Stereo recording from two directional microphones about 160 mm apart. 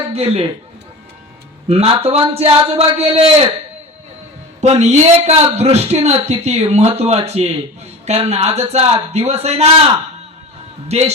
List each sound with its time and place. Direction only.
0.1 s a man's voice: 40° right (ahead or behind)
1.6 s a man's voice: 40° right (ahead or behind)
4.6 s a man's voice: 45° right (ahead or behind)